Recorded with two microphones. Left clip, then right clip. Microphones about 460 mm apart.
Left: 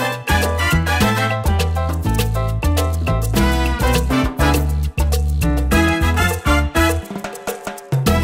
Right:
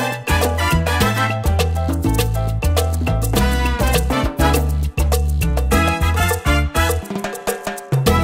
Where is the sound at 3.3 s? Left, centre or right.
Right.